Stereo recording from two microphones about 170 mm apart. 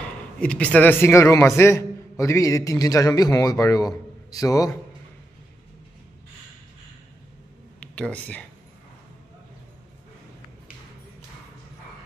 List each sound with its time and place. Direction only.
0.4 s a man's voice: 5° left (ahead or behind)
7.8 s speech: 5° left (ahead or behind)